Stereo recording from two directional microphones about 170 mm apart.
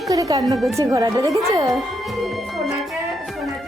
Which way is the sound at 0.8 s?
20° right (ahead or behind).